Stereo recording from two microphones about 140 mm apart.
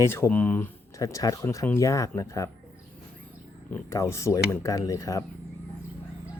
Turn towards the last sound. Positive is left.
turn(degrees=25)  # may be behind; listen again after turning